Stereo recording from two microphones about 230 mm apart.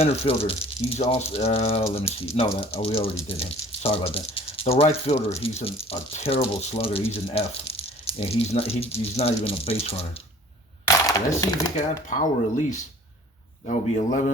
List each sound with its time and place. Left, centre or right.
0.0 s speech: left
10.8 s speech: centre
12.1 s speech: left